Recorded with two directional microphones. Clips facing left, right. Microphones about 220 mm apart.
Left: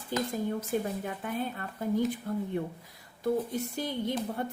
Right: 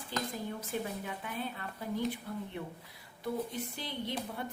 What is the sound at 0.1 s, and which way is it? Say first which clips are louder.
A woman's voice: left 7 dB; 50° left (ahead or behind).